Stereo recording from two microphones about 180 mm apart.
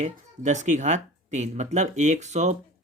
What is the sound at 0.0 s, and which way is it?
A child's voice, 40° right (ahead or behind).